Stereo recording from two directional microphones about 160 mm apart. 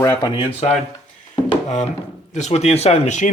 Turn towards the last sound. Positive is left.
turn(degrees=45)  # may be behind; listen again after turning